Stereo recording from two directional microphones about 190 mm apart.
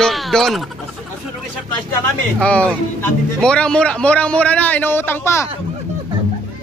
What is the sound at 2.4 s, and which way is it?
A man's voice, 5° left (ahead or behind).